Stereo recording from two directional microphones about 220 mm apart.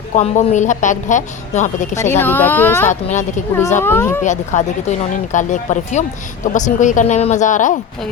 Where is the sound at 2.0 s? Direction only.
10° left (ahead or behind).